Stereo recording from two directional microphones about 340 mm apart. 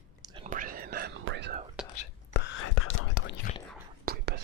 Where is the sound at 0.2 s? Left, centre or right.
Centre; by 1.6 s right.